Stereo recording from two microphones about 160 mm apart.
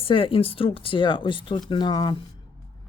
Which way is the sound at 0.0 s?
35° left (ahead or behind).